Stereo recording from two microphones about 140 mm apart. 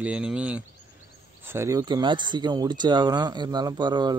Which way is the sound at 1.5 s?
20° right (ahead or behind).